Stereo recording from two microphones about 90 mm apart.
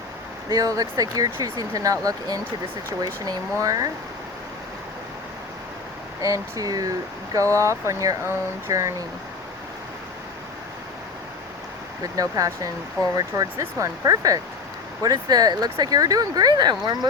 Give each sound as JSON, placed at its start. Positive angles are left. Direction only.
{"t": 0.5, "sound": "speech", "side_deg": -40}
{"t": 6.2, "sound": "speech", "side_deg": -40}
{"t": 12.1, "sound": "speech", "side_deg": -40}